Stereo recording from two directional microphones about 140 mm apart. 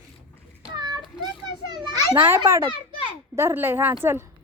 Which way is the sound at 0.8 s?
30° right (ahead or behind).